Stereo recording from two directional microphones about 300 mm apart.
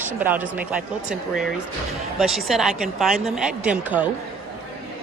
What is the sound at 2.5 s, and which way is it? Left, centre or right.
Speech, centre.